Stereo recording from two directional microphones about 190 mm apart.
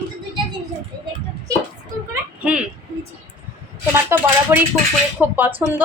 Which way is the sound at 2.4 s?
5° right (ahead or behind).